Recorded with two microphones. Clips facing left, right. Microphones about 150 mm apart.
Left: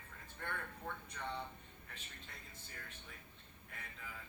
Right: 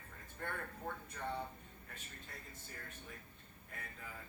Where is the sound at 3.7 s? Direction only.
45° right (ahead or behind).